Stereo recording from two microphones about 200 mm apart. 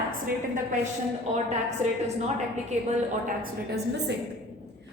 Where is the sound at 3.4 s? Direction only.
55° right (ahead or behind).